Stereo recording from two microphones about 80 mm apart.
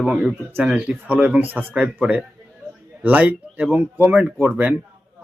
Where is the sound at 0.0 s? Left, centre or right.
Centre.